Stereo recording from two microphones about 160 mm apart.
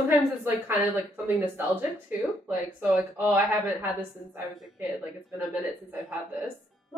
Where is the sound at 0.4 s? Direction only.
15° right (ahead or behind).